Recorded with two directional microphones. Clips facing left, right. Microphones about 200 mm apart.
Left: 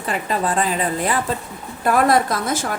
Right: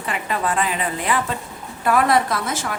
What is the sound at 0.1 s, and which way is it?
A woman's voice, 35° left (ahead or behind).